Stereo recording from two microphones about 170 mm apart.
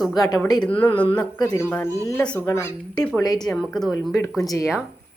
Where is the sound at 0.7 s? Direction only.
10° left (ahead or behind).